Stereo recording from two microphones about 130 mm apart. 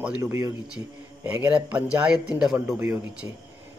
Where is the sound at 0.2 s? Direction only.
25° right (ahead or behind).